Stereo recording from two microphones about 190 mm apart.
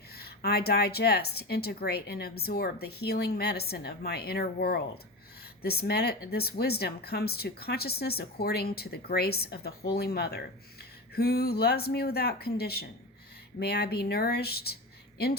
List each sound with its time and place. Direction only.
0.1 s speech: 55° left (ahead or behind)